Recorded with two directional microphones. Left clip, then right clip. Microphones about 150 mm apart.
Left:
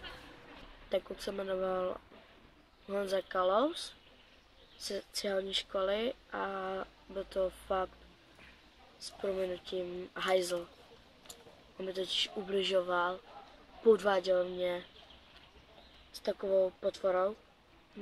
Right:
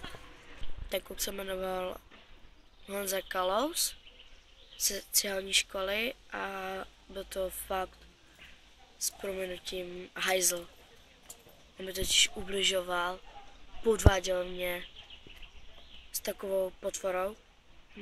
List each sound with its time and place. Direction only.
0.8 s speech: 5° right (ahead or behind)
4.8 s speech: 5° right (ahead or behind)
9.2 s speech: 5° right (ahead or behind)
11.7 s speech: 5° right (ahead or behind)
16.3 s speech: 5° right (ahead or behind)